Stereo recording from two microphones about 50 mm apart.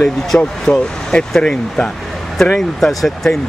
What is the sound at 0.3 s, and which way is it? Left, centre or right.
Speech, left.